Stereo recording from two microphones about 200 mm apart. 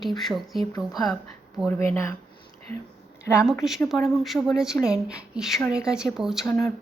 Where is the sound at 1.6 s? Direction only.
10° left (ahead or behind).